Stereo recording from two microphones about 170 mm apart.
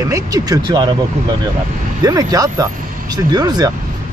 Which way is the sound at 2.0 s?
20° right (ahead or behind).